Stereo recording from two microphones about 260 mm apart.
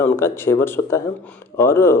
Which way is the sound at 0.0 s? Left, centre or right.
Centre.